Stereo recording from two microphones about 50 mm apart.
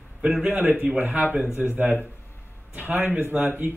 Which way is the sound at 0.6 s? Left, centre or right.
Right.